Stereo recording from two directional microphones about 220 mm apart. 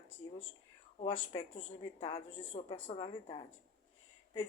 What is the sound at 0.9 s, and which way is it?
A woman's voice, 25° left (ahead or behind).